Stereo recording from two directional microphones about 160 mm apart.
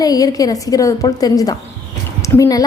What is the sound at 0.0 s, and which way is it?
A woman's voice, 25° left (ahead or behind).